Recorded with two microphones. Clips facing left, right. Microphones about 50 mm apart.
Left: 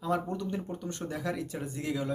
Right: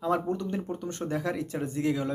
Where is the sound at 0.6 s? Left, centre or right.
Right.